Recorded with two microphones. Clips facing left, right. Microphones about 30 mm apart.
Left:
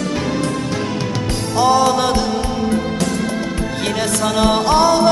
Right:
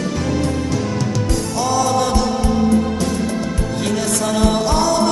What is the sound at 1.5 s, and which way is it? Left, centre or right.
Music, left.